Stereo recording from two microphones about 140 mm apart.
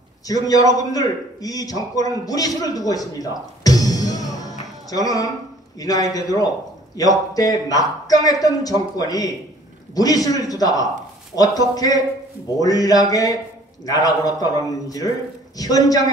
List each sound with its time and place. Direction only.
0.3 s a man's voice: 25° left (ahead or behind)